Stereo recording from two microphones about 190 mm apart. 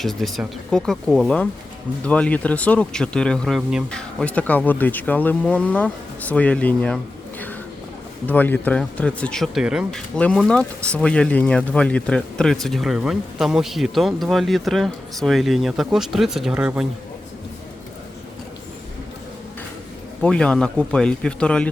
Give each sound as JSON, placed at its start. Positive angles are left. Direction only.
{"t": 0.0, "sound": "speech", "side_deg": 0}
{"t": 20.2, "sound": "speech", "side_deg": 5}